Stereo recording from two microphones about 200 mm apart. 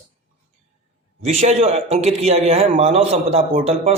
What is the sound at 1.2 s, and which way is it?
Speech, 35° right (ahead or behind).